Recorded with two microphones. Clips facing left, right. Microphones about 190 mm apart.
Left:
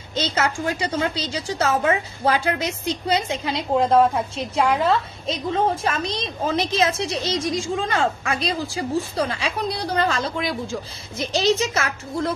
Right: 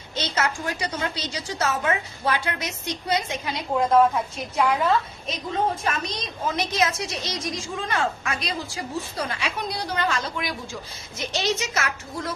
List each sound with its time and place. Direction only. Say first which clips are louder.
0.1 s a woman's voice: left 3 dB; 30° left (ahead or behind)